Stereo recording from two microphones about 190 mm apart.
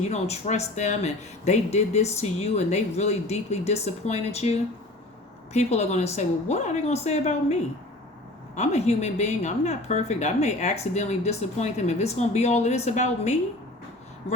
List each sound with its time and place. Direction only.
0.0 s speech: 35° left (ahead or behind)